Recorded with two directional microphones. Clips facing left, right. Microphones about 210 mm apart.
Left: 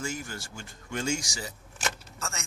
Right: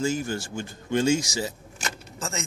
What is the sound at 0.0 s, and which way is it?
Speech, 25° right (ahead or behind).